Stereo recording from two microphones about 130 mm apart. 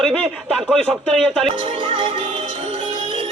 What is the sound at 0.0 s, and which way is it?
Speech, 5° left (ahead or behind).